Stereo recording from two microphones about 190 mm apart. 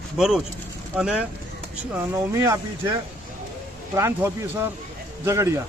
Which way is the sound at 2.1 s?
15° right (ahead or behind).